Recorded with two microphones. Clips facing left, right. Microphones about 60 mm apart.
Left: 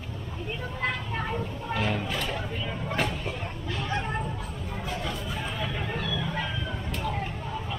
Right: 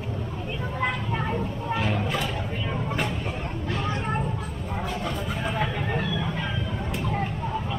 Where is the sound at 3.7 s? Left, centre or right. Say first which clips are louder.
Right 2 dB; right.